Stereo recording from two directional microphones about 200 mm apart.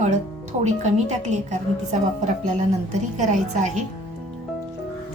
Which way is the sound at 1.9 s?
35° right (ahead or behind).